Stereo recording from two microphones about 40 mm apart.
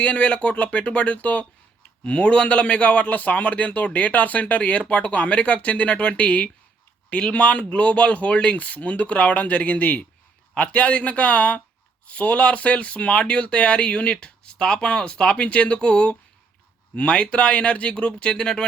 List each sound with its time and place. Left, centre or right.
0.0 s speech: left
10.5 s speech: left